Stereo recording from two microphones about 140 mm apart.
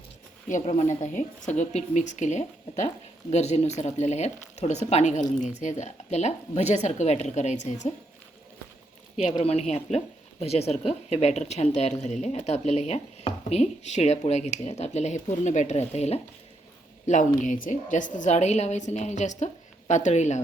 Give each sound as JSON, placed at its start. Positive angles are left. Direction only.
{"t": 0.6, "sound": "a woman's voice", "side_deg": 55}
{"t": 9.4, "sound": "a woman's voice", "side_deg": 50}
{"t": 17.1, "sound": "speech", "side_deg": 65}